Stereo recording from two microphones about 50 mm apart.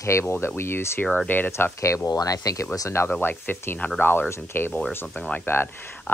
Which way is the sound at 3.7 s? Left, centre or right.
Left.